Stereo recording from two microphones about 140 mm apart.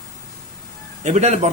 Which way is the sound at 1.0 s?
55° right (ahead or behind).